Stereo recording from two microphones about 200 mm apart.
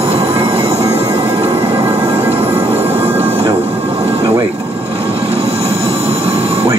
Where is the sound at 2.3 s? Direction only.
30° right (ahead or behind).